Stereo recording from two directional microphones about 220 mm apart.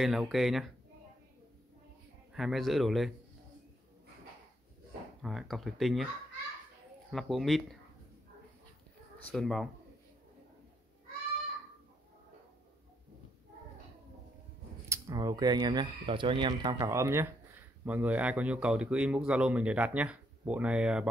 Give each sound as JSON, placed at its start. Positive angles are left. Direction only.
{"t": 0.0, "sound": "speech", "side_deg": 0}
{"t": 2.3, "sound": "speech", "side_deg": 0}
{"t": 5.2, "sound": "speech", "side_deg": 0}
{"t": 7.1, "sound": "speech", "side_deg": 0}
{"t": 9.2, "sound": "speech", "side_deg": 5}
{"t": 14.9, "sound": "speech", "side_deg": -15}